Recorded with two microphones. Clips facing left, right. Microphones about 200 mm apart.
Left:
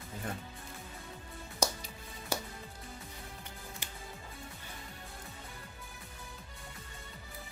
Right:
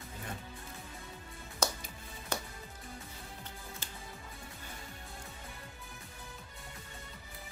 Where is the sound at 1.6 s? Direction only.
15° left (ahead or behind).